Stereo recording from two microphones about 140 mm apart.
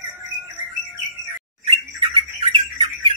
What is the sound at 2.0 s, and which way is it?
Bird, 40° right (ahead or behind).